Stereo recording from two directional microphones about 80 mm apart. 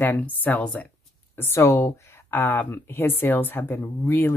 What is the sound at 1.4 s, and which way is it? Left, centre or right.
Speech, left.